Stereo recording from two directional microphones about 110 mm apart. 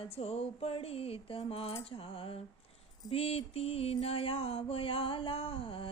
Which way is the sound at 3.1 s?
60° left (ahead or behind).